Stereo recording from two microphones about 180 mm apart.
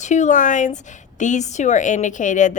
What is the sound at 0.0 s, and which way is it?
A woman's voice, 40° left (ahead or behind).